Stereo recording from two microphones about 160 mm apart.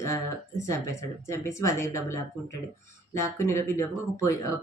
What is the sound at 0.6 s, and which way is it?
Speech, 20° left (ahead or behind).